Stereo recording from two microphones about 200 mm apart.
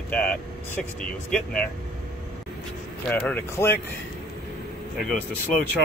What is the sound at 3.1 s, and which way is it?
Speech, 10° left (ahead or behind).